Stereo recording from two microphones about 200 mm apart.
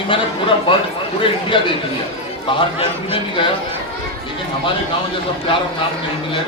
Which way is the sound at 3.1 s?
25° left (ahead or behind).